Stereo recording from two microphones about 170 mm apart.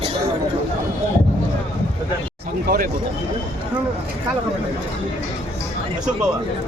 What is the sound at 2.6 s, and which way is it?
Speech, 60° right (ahead or behind).